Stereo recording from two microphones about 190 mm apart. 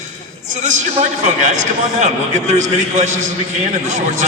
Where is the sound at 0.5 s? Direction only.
40° right (ahead or behind).